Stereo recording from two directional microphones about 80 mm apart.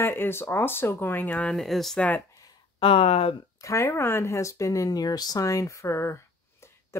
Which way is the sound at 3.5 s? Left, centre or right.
Left.